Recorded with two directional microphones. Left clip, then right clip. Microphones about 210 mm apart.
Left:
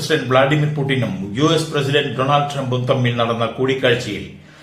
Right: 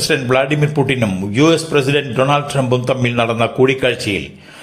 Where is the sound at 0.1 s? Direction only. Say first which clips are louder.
Left 2 dB; 40° right (ahead or behind).